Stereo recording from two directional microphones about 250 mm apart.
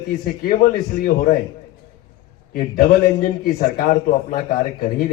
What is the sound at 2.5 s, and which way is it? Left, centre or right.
A man's voice, left.